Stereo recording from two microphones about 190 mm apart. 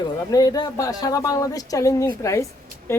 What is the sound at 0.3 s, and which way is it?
Speech, 20° left (ahead or behind).